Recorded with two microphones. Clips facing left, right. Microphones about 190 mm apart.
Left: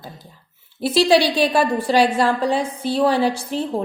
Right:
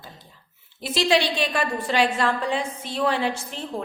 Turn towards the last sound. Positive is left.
turn(degrees=35)  # may be behind; listen again after turning